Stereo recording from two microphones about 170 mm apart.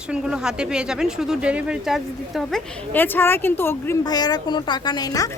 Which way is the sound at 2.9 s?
10° left (ahead or behind).